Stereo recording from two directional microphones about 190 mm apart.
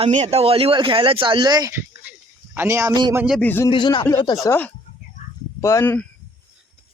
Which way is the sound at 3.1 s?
5° right (ahead or behind).